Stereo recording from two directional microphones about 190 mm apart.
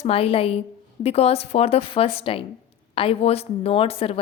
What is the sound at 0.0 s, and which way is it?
A woman's voice, 30° left (ahead or behind).